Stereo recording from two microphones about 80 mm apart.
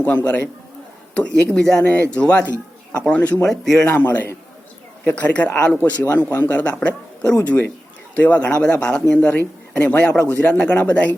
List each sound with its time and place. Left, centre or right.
0.0 s speech: centre
1.5 s a man's voice: centre
3.4 s speech: centre
3.8 s a man's voice: left